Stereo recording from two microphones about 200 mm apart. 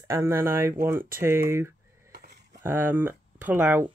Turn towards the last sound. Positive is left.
turn(degrees=-10)  # may be behind; listen again after turning